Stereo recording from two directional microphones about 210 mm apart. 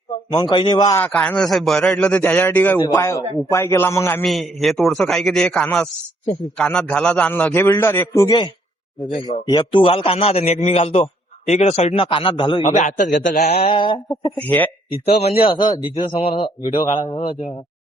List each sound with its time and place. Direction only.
0.3 s a man's voice: 20° left (ahead or behind)
4.2 s a man's voice: centre (ahead or behind); by 13.6 s 35° left (ahead or behind)
13.7 s a man's voice: 25° left (ahead or behind)
14.4 s a man's voice: 10° left (ahead or behind)
15.1 s a man's voice: 30° left (ahead or behind)